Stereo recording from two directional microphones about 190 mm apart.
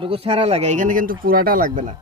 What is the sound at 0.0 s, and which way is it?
Speech, 30° right (ahead or behind).